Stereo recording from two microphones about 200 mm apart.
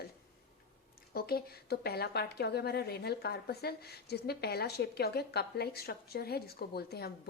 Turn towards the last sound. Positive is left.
turn(degrees=50)  # may be behind; listen again after turning